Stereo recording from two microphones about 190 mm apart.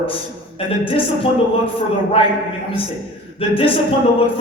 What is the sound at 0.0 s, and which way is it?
A man's voice, 30° left (ahead or behind).